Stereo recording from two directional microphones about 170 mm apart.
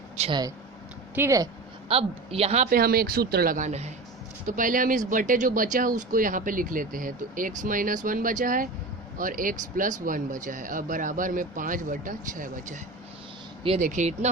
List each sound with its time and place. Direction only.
0.2 s speech: 25° right (ahead or behind)
1.1 s speech: 15° right (ahead or behind)
1.9 s speech: 35° right (ahead or behind)
2.6 s speech: 60° right (ahead or behind); by 14.3 s 40° right (ahead or behind)